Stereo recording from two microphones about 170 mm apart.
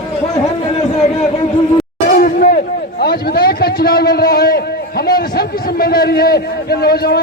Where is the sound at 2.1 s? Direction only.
55° left (ahead or behind).